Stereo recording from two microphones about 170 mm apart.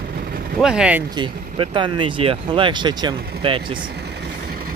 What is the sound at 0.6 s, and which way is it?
Speech, 5° right (ahead or behind).